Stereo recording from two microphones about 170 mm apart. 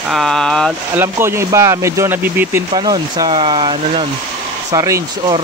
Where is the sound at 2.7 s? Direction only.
25° right (ahead or behind).